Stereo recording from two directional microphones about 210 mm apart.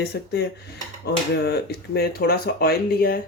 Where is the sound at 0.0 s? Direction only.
50° left (ahead or behind).